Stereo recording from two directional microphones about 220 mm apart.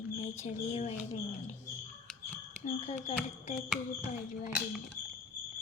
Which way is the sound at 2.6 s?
25° left (ahead or behind).